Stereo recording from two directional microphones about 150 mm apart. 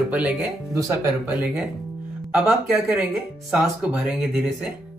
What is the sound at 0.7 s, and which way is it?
Speech, 20° right (ahead or behind).